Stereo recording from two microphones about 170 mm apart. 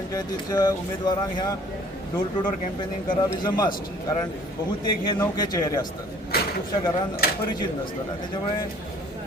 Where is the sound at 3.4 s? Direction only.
25° left (ahead or behind).